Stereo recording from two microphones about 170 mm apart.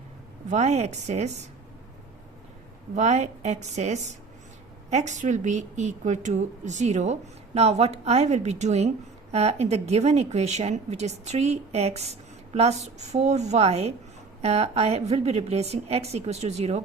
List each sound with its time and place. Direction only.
0.5 s a woman's voice: 40° right (ahead or behind)
2.9 s a woman's voice: 40° right (ahead or behind)